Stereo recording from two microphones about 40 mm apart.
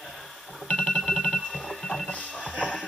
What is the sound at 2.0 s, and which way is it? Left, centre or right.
Music, left.